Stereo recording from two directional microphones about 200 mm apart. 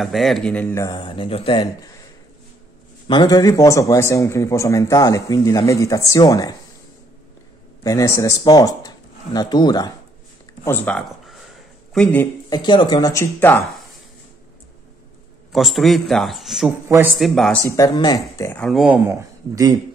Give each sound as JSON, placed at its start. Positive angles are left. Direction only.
{"t": 0.0, "sound": "a man's voice", "side_deg": 0}
{"t": 3.1, "sound": "a man's voice", "side_deg": 20}
{"t": 7.8, "sound": "speech", "side_deg": 15}
{"t": 10.6, "sound": "a man's voice", "side_deg": 10}
{"t": 12.4, "sound": "speech", "side_deg": 20}
{"t": 15.5, "sound": "a man's voice", "side_deg": 0}
{"t": 17.6, "sound": "a man's voice", "side_deg": 15}
{"t": 18.6, "sound": "a man's voice", "side_deg": 0}
{"t": 19.0, "sound": "speech", "side_deg": -15}